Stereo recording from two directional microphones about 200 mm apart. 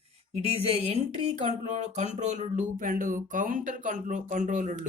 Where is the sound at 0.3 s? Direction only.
30° right (ahead or behind).